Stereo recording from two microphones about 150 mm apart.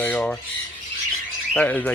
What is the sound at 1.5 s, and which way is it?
Speech, 5° left (ahead or behind).